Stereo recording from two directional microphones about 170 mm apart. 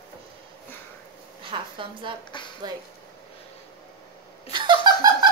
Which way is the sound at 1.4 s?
30° right (ahead or behind).